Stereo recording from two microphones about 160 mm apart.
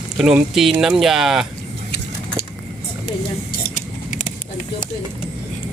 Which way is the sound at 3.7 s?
50° left (ahead or behind).